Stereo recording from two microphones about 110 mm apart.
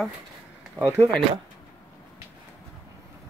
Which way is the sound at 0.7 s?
20° right (ahead or behind).